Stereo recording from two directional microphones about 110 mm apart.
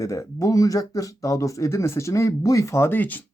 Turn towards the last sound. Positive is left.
turn(degrees=15)  # may be behind; listen again after turning